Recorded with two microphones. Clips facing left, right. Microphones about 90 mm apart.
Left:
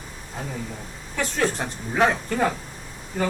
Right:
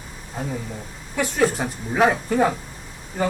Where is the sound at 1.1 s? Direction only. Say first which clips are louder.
Right 4 dB; 10° right (ahead or behind).